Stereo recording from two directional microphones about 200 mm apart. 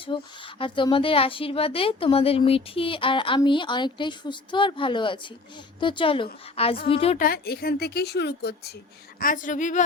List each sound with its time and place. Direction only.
0.0 s a woman's voice: 25° left (ahead or behind)
7.2 s a woman's voice: 50° left (ahead or behind)
9.1 s a woman's voice: 45° left (ahead or behind)